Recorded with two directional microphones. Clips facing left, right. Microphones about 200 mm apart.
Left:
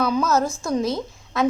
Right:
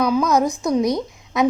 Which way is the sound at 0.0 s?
10° right (ahead or behind).